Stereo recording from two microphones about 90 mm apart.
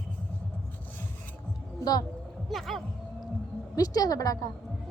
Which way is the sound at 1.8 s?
45° left (ahead or behind).